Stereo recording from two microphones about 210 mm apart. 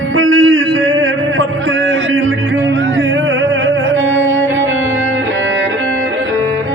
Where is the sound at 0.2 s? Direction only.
70° right (ahead or behind).